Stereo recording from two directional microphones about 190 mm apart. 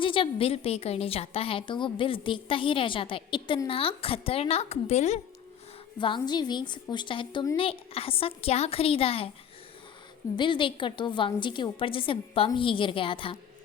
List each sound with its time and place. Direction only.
0.0 s a woman's voice: 25° left (ahead or behind)
6.0 s a woman's voice: 25° left (ahead or behind)
10.3 s a woman's voice: 25° left (ahead or behind)